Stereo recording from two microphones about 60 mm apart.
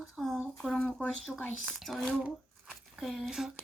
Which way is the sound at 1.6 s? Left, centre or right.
Centre.